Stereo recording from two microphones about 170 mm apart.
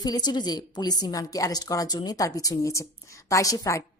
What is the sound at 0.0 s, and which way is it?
A woman's voice, 25° left (ahead or behind).